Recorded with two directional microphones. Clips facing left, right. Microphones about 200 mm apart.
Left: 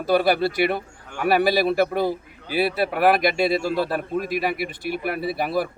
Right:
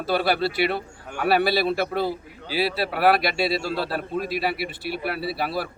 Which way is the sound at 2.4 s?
55° left (ahead or behind).